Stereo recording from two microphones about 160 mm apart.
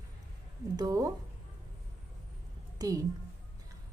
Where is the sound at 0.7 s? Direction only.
20° right (ahead or behind).